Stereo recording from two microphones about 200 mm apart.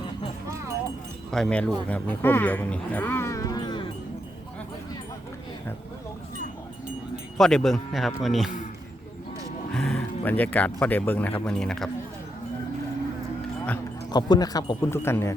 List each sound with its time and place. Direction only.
1.3 s speech: 5° left (ahead or behind); by 3.8 s 20° left (ahead or behind)
7.3 s speech: centre (ahead or behind)
9.7 s speech: 5° left (ahead or behind)
14.1 s speech: 20° left (ahead or behind)